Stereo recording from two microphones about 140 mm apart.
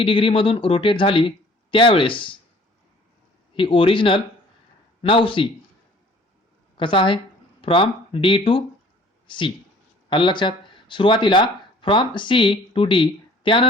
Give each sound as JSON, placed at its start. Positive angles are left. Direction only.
{"t": 0.0, "sound": "speech", "side_deg": 40}
{"t": 3.5, "sound": "speech", "side_deg": 40}
{"t": 6.7, "sound": "a woman's voice", "side_deg": 35}